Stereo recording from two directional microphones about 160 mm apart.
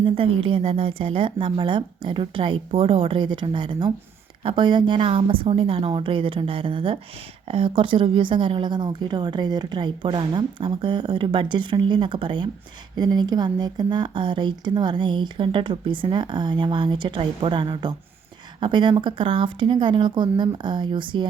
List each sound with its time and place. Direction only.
0.0 s speech: 35° right (ahead or behind)